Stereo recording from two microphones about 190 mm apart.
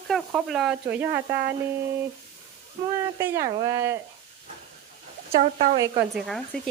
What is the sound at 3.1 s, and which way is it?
Speech, 15° right (ahead or behind).